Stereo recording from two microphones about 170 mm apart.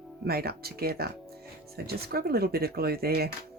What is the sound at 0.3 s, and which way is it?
Speech, 65° right (ahead or behind).